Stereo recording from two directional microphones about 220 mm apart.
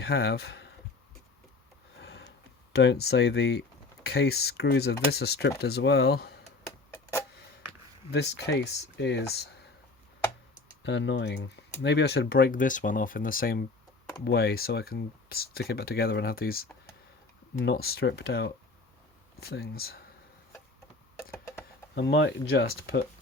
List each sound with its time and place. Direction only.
0.0 s speech: 45° left (ahead or behind)
2.0 s a sound: 55° left (ahead or behind)
2.7 s speech: 50° left (ahead or behind)
8.1 s speech: 50° left (ahead or behind)
10.8 s speech: 55° left (ahead or behind)
21.9 s speech: 50° left (ahead or behind)